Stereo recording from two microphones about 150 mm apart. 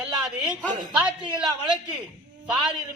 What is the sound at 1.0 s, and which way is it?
Speech, 30° right (ahead or behind).